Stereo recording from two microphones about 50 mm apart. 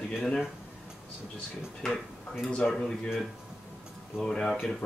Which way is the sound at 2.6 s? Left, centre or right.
Centre.